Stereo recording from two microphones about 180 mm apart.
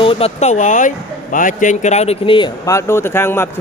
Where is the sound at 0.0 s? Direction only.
30° left (ahead or behind).